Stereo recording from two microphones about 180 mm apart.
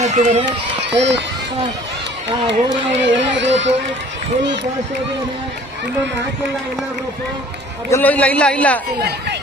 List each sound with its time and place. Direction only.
0.0 s speech: 40° right (ahead or behind)
0.9 s speech: 75° right (ahead or behind)
2.5 s speech: 80° right
7.9 s a man's voice: 10° left (ahead or behind)
9.0 s speech: 65° right (ahead or behind)